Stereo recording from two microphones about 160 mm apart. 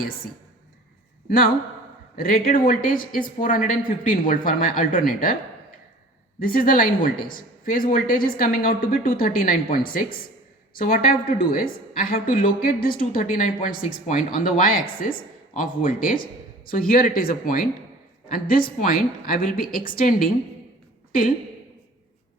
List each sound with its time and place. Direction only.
2.1 s a woman's voice: 65° left (ahead or behind)
6.4 s a woman's voice: 65° left (ahead or behind)